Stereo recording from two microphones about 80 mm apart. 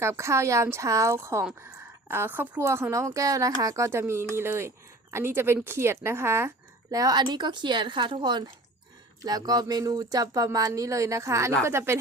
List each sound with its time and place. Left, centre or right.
0.0 s a woman's voice: right
6.9 s speech: right
9.2 s a woman's voice: right